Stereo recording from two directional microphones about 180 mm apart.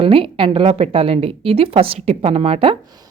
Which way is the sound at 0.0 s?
30° right (ahead or behind).